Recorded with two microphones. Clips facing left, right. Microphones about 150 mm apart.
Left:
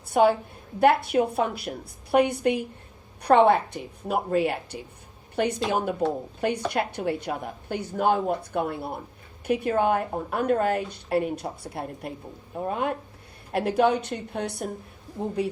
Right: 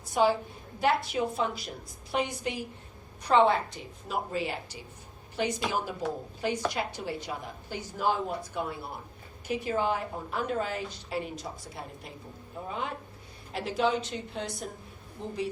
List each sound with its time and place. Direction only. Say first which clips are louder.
0.1 s a woman's voice: left 5 dB; 60° left (ahead or behind)